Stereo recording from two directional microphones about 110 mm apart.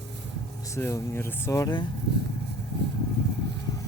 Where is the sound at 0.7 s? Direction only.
25° left (ahead or behind).